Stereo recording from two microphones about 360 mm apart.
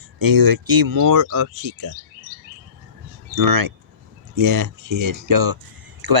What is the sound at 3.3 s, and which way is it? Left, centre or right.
Speech, right.